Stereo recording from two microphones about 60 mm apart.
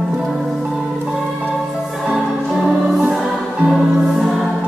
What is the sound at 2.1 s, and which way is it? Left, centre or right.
Music, centre.